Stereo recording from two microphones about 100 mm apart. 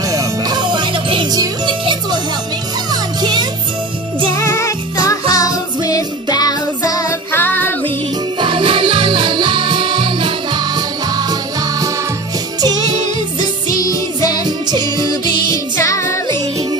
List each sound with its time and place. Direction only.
0.1 s music: 40° right (ahead or behind); by 1.3 s 55° right (ahead or behind)
1.3 s music: 45° right (ahead or behind)
4.4 s music: 30° left (ahead or behind)
7.3 s music: 20° left (ahead or behind)
8.4 s music: 55° right (ahead or behind)
13.4 s music: 40° left (ahead or behind)
14.4 s music: 45° right (ahead or behind)
15.5 s music: 35° left (ahead or behind)